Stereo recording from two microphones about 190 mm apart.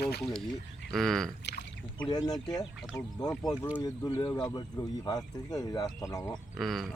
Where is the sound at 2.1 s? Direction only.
20° left (ahead or behind).